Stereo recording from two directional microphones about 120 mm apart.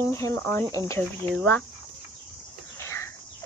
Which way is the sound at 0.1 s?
25° left (ahead or behind).